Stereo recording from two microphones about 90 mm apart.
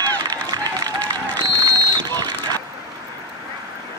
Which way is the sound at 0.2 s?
50° right (ahead or behind).